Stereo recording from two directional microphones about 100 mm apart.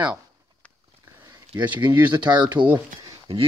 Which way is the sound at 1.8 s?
45° right (ahead or behind).